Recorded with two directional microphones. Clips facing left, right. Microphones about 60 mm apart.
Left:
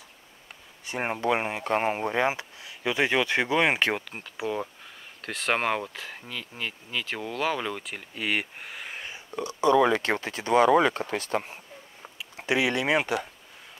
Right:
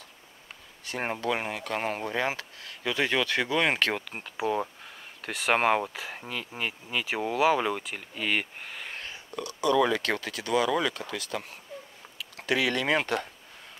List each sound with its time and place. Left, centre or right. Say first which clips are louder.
0.8 s speech: left 3 dB; centre
4.5 s speech: right 2 dB; centre
9.1 s a sound: left 3 dB; left
9.9 s speech: left 2 dB; left; by 13.3 s centre